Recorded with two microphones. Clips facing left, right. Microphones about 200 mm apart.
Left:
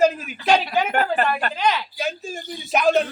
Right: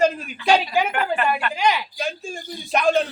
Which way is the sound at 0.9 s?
40° left (ahead or behind).